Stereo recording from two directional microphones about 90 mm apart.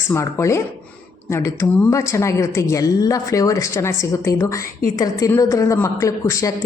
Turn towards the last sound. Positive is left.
turn(degrees=35)  # may be behind; listen again after turning